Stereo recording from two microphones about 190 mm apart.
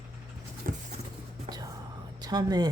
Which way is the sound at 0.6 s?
45° right (ahead or behind).